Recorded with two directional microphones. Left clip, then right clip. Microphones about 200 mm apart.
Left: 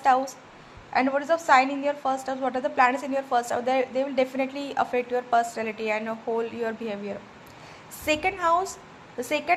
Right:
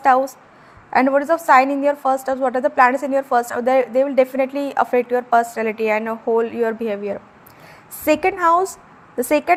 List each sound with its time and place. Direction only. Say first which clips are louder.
0.0 s a woman's voice: right 7 dB; 45° right (ahead or behind)